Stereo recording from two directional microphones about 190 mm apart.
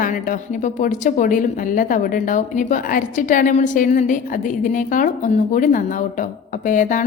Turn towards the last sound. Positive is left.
turn(degrees=45)  # may be behind; listen again after turning